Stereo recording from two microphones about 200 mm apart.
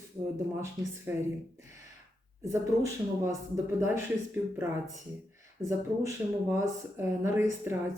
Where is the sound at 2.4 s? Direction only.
15° right (ahead or behind).